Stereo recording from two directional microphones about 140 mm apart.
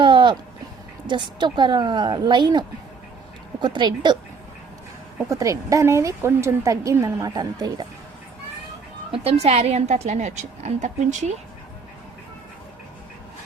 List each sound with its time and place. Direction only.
0.0 s a sound: 35° right (ahead or behind)
1.0 s a woman's voice: 35° right (ahead or behind)
5.3 s a woman's voice: 20° right (ahead or behind)
9.1 s a woman's voice: 45° right (ahead or behind)